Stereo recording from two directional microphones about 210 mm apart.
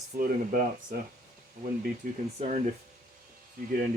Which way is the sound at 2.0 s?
40° right (ahead or behind).